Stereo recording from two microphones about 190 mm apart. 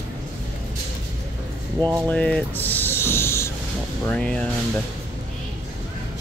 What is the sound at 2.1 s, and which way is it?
Speech, 5° left (ahead or behind).